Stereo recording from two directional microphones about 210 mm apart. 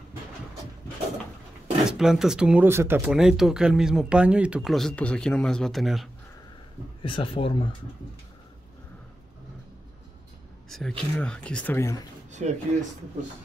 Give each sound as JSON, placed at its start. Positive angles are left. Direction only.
{"t": 1.9, "sound": "speech", "side_deg": 0}
{"t": 7.0, "sound": "a man's voice", "side_deg": 25}
{"t": 10.7, "sound": "speech", "side_deg": 0}
{"t": 12.3, "sound": "speech", "side_deg": -35}